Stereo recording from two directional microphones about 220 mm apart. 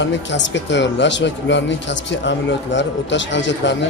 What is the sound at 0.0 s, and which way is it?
Speech, 55° left (ahead or behind).